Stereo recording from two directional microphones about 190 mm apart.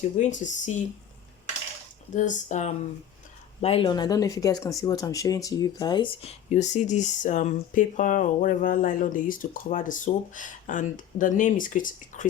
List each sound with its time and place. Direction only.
0.2 s speech: 40° left (ahead or behind)
2.1 s speech: 40° left (ahead or behind); by 6.3 s 25° left (ahead or behind)
6.5 s speech: 40° left (ahead or behind)